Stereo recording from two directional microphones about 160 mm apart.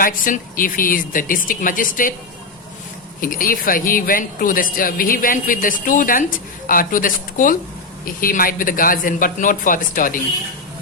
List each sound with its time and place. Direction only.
0.0 s speech: 60° left (ahead or behind)
3.2 s speech: 60° left (ahead or behind)